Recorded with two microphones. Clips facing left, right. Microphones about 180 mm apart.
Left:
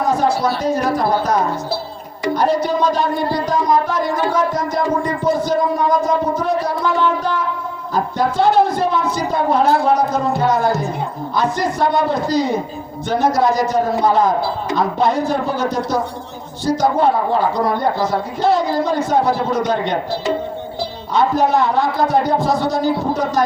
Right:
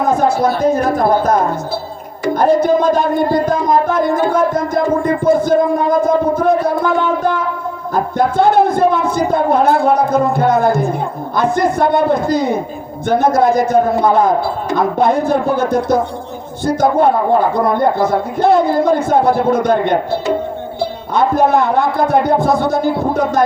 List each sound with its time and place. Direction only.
0.0 s music: 50° right (ahead or behind)
11.3 s a man's voice: 55° right (ahead or behind)
16.6 s music: 55° right (ahead or behind)